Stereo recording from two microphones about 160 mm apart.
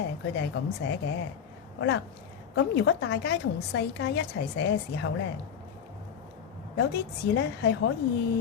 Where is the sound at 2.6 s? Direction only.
90° left.